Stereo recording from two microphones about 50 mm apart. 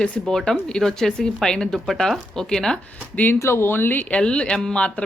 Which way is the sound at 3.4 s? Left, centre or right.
Left.